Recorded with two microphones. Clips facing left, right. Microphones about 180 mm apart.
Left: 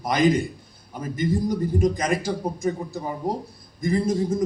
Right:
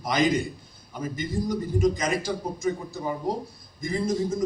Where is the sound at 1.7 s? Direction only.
55° left (ahead or behind).